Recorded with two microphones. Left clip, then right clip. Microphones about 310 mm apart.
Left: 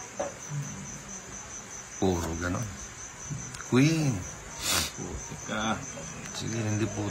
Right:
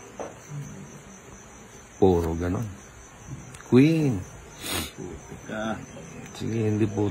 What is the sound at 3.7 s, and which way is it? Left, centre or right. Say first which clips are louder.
Speech: right 6 dB; centre.